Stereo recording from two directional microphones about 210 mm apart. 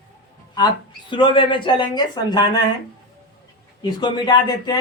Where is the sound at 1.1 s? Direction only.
25° left (ahead or behind).